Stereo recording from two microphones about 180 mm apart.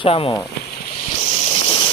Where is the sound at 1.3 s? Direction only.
35° left (ahead or behind).